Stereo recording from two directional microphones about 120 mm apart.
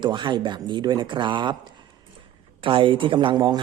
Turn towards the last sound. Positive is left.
turn(degrees=-40)  # may be behind; listen again after turning